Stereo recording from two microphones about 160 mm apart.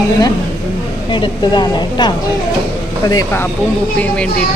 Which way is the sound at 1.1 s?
30° left (ahead or behind).